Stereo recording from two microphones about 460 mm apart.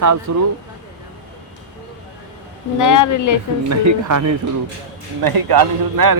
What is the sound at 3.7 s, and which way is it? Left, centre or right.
Speech, right.